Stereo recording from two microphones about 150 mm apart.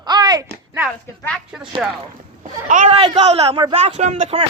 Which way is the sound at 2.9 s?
40° right (ahead or behind).